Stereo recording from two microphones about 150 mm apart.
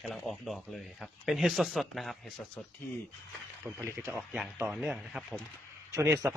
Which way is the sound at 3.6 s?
20° right (ahead or behind).